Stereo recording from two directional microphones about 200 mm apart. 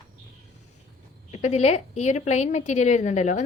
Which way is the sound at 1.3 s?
35° left (ahead or behind).